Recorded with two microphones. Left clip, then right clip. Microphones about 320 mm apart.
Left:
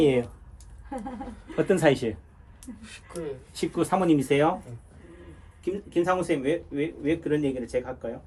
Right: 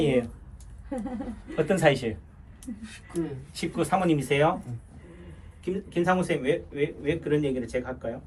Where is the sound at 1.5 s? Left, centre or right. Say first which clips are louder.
Left 1 dB; left.